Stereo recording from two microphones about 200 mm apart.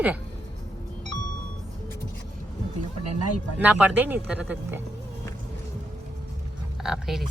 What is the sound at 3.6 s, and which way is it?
Speech, 5° right (ahead or behind).